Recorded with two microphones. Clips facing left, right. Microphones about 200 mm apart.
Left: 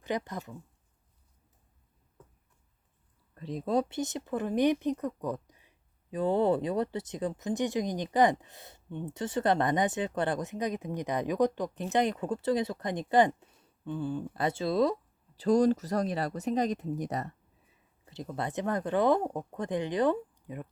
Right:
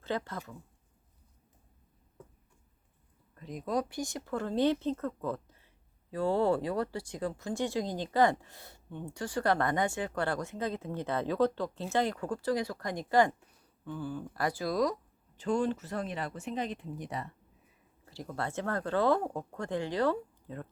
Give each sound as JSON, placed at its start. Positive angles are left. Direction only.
{"t": 0.0, "sound": "speech", "side_deg": 15}
{"t": 3.3, "sound": "speech", "side_deg": 30}
{"t": 15.4, "sound": "speech", "side_deg": 35}
{"t": 18.0, "sound": "speech", "side_deg": 20}